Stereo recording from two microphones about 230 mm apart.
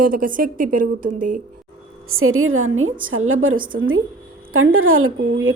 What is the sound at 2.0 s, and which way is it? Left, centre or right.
A woman's voice, right.